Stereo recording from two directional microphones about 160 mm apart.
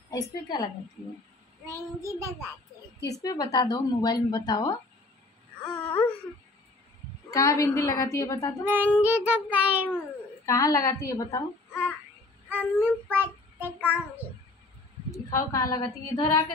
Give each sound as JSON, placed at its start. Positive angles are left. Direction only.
{"t": 0.1, "sound": "a woman's voice", "side_deg": 25}
{"t": 1.7, "sound": "child singing", "side_deg": -20}
{"t": 3.0, "sound": "a woman's voice", "side_deg": 20}
{"t": 5.7, "sound": "speech", "side_deg": 10}
{"t": 7.2, "sound": "a woman's voice", "side_deg": 20}
{"t": 8.6, "sound": "child singing", "side_deg": -10}
{"t": 9.8, "sound": "speech", "side_deg": 15}
{"t": 12.4, "sound": "a sound", "side_deg": -10}
{"t": 13.2, "sound": "child singing", "side_deg": -10}
{"t": 15.0, "sound": "a woman's voice", "side_deg": 20}